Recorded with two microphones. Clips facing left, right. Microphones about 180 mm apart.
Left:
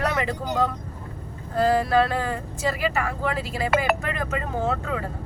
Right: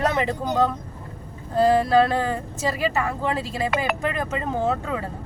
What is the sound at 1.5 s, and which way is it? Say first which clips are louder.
Speech: right 3 dB; 25° right (ahead or behind).